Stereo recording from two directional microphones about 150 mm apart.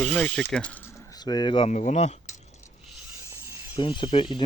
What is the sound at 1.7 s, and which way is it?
Keys jangling, 50° left (ahead or behind).